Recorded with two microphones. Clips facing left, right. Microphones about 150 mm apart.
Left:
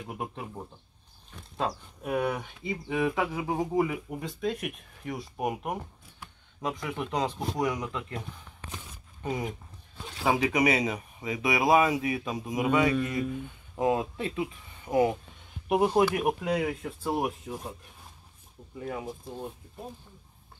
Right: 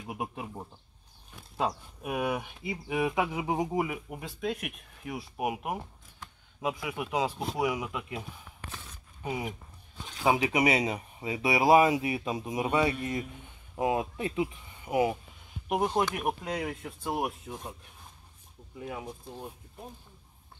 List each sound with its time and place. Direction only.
0.1 s speech: 10° right (ahead or behind)
2.0 s speech: 10° right (ahead or behind)
3.8 s speech: 5° right (ahead or behind)
10.4 s speech: 25° right (ahead or behind)
13.7 s speech: 15° right (ahead or behind)
15.7 s speech: 5° left (ahead or behind)
18.8 s speech: centre (ahead or behind)